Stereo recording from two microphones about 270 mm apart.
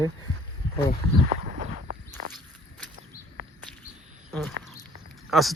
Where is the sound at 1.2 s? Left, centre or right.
Right.